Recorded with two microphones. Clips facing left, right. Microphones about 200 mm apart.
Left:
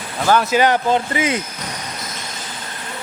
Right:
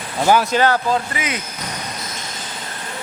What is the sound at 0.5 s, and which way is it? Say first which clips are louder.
Speech: left 1 dB; 20° left (ahead or behind).